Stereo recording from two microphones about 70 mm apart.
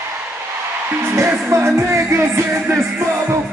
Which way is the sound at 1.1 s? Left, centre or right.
Right.